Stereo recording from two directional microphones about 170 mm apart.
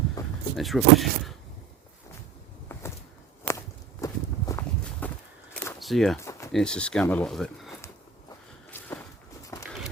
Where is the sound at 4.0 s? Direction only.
20° left (ahead or behind).